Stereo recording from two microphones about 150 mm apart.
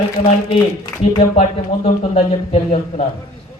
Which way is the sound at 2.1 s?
45° left (ahead or behind).